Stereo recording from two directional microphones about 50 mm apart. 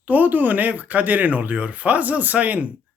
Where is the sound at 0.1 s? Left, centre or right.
Right.